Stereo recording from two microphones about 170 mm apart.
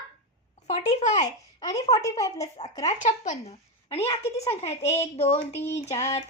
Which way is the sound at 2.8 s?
45° left (ahead or behind).